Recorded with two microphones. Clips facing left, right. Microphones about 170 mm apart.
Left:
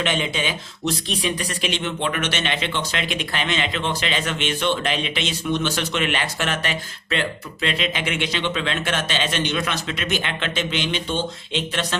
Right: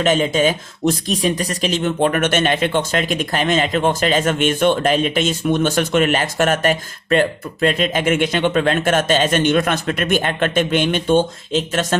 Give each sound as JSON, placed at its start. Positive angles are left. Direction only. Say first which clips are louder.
{"t": 0.0, "sound": "speech", "louder": "right 8 dB", "side_deg": -40}